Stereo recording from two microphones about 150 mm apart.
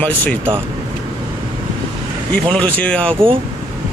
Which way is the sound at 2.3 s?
10° left (ahead or behind).